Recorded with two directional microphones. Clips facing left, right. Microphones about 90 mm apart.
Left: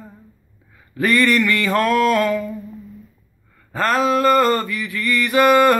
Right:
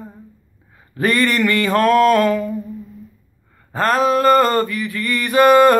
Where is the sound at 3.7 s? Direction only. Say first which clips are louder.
Right 2 dB; 35° right (ahead or behind).